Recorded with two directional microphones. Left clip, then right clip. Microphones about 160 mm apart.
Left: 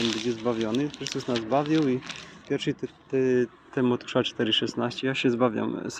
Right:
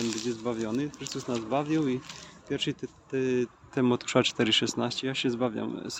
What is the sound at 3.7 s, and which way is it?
Speech, 30° right (ahead or behind).